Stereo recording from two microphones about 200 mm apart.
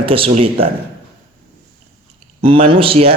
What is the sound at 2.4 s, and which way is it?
Speech, 25° right (ahead or behind).